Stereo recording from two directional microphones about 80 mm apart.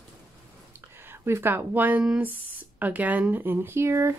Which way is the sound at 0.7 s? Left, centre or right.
Right.